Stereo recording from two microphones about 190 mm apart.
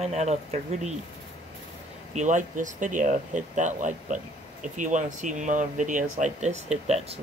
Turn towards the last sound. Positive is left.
turn(degrees=-35)  # may be behind; listen again after turning